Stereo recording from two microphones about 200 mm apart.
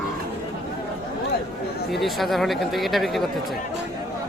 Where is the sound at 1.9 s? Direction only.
Centre (ahead or behind).